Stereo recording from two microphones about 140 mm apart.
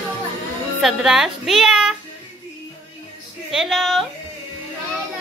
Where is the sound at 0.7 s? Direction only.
Centre (ahead or behind).